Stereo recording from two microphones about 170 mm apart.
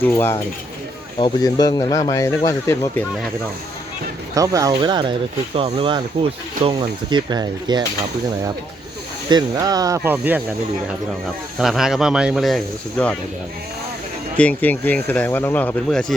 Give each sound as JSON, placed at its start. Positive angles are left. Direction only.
{"t": 0.0, "sound": "speech", "side_deg": 10}
{"t": 1.2, "sound": "speech", "side_deg": 20}
{"t": 4.4, "sound": "speech", "side_deg": -20}
{"t": 9.3, "sound": "speech", "side_deg": -20}
{"t": 11.6, "sound": "speech", "side_deg": 0}
{"t": 14.3, "sound": "speech", "side_deg": 10}